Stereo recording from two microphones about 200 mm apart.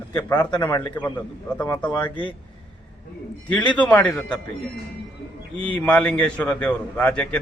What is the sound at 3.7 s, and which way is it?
Speech, 5° left (ahead or behind).